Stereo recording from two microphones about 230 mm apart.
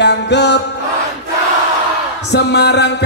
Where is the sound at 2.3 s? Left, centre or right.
Left.